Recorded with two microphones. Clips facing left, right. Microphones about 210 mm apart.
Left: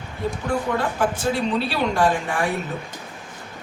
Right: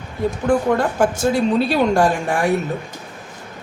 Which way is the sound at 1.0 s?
45° right (ahead or behind).